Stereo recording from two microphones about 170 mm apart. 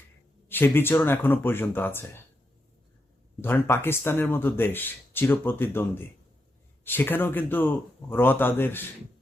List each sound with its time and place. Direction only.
0.4 s speech: 15° left (ahead or behind)
3.4 s speech: 15° left (ahead or behind)